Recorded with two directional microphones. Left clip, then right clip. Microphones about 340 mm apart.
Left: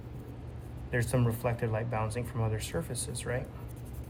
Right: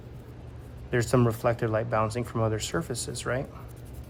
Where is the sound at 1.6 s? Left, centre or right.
Right.